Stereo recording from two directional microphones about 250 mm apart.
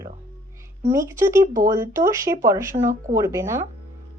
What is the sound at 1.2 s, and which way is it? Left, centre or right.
Speech, centre.